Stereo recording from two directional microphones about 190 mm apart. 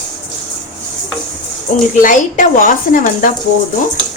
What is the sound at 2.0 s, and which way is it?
A woman's voice, 45° left (ahead or behind).